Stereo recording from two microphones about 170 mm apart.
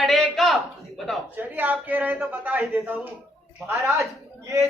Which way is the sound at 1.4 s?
10° right (ahead or behind).